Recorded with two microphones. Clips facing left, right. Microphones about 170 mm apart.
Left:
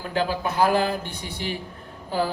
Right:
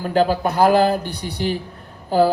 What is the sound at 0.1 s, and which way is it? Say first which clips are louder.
Mantra: right 7 dB; 40° right (ahead or behind).